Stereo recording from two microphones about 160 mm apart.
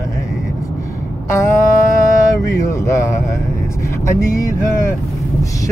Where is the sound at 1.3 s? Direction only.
20° left (ahead or behind).